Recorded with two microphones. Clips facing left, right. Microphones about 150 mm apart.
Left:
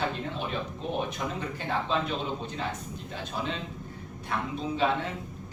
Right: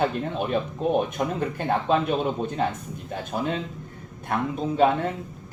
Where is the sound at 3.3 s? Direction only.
50° right (ahead or behind).